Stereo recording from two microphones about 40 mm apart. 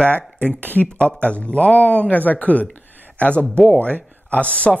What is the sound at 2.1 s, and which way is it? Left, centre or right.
Speech, left.